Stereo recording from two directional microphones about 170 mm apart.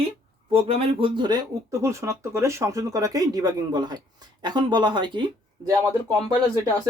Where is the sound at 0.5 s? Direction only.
35° right (ahead or behind).